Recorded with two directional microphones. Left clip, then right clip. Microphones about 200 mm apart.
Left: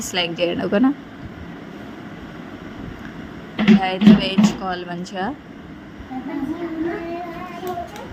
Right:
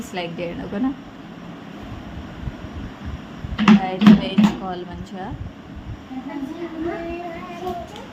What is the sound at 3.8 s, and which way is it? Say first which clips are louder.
Speech: left 1 dB; 30° left (ahead or behind).